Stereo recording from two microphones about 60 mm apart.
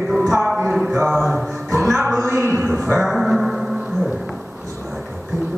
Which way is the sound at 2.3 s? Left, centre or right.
Right.